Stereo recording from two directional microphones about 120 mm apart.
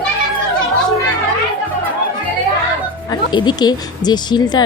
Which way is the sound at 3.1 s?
40° left (ahead or behind).